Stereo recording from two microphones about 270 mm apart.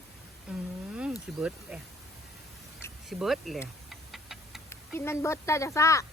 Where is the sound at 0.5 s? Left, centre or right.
Centre.